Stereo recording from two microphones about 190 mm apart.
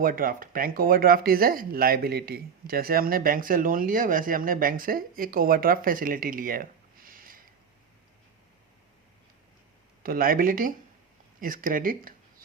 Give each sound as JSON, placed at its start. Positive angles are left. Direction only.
{"t": 0.0, "sound": "speech", "side_deg": -50}
{"t": 10.0, "sound": "speech", "side_deg": -50}